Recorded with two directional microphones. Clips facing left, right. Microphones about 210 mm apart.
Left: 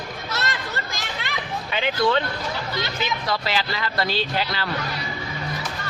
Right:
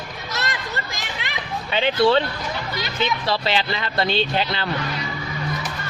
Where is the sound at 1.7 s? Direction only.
30° right (ahead or behind).